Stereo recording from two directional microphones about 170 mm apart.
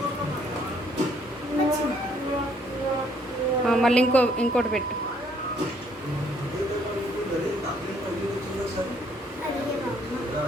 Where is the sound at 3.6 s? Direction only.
Centre (ahead or behind).